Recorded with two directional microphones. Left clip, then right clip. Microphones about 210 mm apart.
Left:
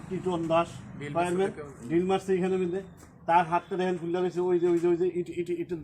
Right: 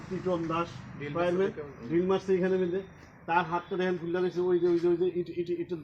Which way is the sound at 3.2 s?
10° left (ahead or behind).